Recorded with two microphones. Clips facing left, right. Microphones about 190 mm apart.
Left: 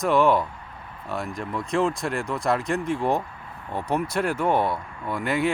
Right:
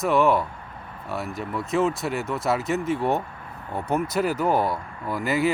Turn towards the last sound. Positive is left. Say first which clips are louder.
# right 1 dB
turn(degrees=-5)  # may be behind; listen again after turning